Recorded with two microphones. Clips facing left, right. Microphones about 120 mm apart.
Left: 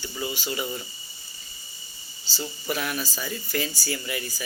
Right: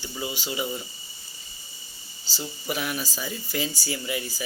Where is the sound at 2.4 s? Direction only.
10° right (ahead or behind).